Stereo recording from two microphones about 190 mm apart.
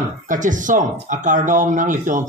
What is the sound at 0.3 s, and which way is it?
Speech, 45° right (ahead or behind).